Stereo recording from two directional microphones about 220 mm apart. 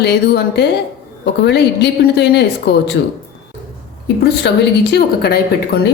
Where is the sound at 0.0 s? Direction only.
45° left (ahead or behind).